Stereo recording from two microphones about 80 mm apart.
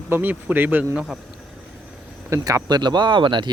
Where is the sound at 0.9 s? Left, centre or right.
Centre.